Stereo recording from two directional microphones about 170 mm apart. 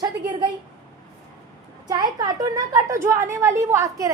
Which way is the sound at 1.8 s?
20° right (ahead or behind).